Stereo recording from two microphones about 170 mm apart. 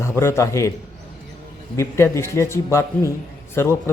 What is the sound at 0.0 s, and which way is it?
Speech, 15° left (ahead or behind).